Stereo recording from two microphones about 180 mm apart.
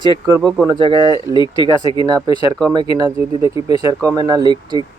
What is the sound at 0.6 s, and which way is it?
Speech, 25° right (ahead or behind).